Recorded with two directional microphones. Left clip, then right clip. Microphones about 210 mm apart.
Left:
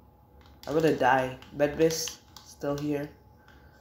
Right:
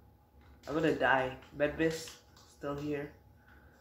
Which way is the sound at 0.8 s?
55° left (ahead or behind).